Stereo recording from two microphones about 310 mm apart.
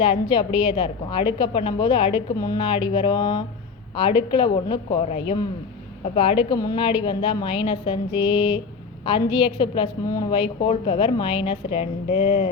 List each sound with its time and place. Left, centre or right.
0.0 s a woman's voice: centre